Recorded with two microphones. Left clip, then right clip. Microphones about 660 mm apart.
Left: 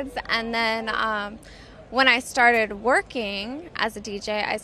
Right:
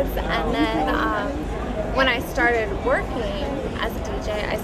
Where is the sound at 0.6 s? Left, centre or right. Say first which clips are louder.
Right 3 dB; left.